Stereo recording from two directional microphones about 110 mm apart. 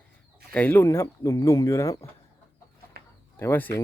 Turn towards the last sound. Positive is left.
turn(degrees=20)  # may be behind; listen again after turning